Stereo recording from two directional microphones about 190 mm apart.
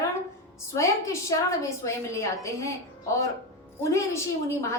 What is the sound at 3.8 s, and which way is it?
Speech, 15° left (ahead or behind).